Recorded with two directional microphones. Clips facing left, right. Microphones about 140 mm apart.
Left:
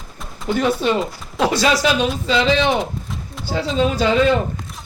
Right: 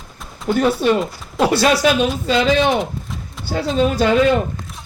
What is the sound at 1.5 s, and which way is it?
Speech, 50° right (ahead or behind).